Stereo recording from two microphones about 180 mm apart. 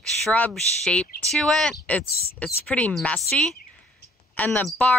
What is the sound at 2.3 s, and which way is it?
Speech, 5° left (ahead or behind).